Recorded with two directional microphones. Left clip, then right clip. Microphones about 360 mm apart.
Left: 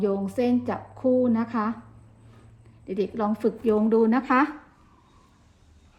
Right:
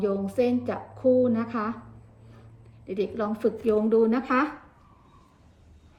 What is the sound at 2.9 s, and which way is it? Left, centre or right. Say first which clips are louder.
Speech: left 2 dB; centre.